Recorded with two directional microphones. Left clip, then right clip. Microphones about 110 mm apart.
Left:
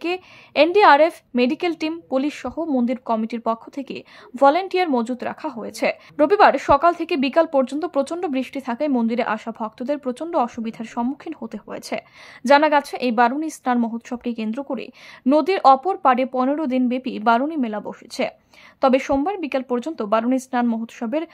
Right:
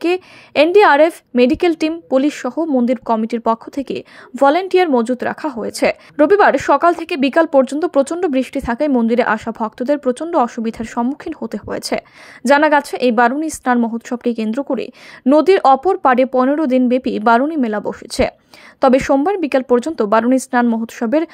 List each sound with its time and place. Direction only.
0.0 s a woman's voice: 35° right (ahead or behind)